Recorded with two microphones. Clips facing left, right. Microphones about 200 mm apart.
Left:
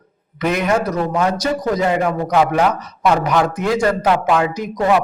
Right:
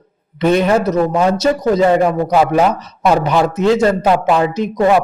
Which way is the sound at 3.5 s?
25° right (ahead or behind).